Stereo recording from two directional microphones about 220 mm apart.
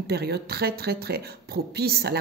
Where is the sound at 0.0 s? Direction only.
45° right (ahead or behind).